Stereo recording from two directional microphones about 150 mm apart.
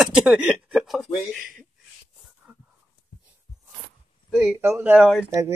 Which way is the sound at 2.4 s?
10° right (ahead or behind).